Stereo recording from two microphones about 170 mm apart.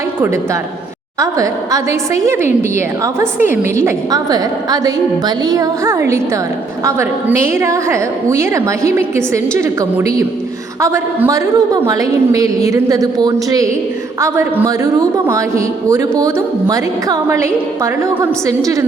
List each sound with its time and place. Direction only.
1.2 s a woman's voice: 20° right (ahead or behind)